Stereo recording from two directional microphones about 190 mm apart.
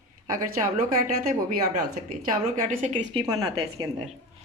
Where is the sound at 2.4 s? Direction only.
40° right (ahead or behind).